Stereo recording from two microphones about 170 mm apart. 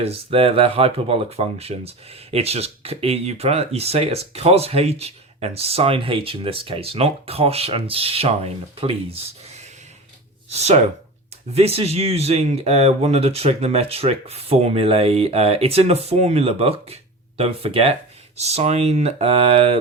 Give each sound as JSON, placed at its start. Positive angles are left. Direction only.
{"t": 0.0, "sound": "speech", "side_deg": -35}
{"t": 10.5, "sound": "speech", "side_deg": -40}